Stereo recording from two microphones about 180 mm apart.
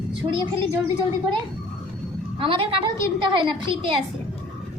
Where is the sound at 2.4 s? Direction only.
30° right (ahead or behind).